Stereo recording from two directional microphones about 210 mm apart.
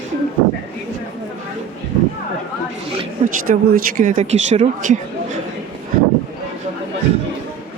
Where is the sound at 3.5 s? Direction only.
40° right (ahead or behind).